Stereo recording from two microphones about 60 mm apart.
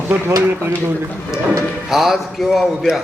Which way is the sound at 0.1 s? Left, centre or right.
Right.